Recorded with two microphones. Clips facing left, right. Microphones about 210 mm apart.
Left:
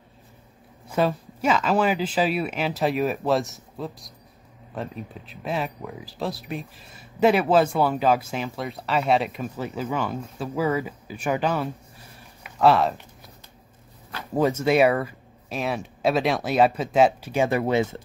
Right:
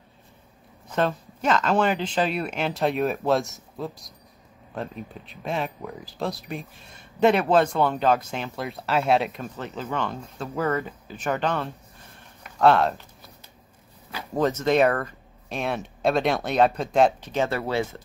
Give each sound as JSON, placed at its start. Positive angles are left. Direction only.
{"t": 0.8, "sound": "speech", "side_deg": 5}
{"t": 12.2, "sound": "a sound", "side_deg": 5}
{"t": 14.3, "sound": "speech", "side_deg": 10}